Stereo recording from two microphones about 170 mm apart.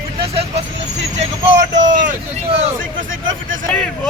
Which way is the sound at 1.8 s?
50° right (ahead or behind).